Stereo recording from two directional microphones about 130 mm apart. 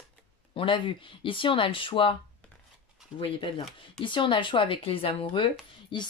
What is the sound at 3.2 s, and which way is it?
Speech, 40° left (ahead or behind).